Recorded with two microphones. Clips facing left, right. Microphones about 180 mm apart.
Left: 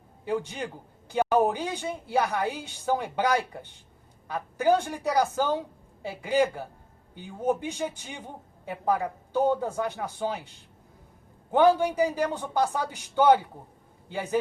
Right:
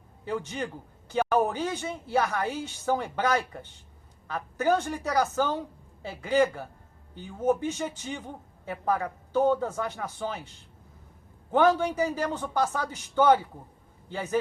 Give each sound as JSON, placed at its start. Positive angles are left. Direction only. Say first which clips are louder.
{"t": 0.3, "sound": "a man's voice", "louder": "left 2 dB", "side_deg": 15}
{"t": 11.5, "sound": "a man's voice", "louder": "left 2 dB", "side_deg": 15}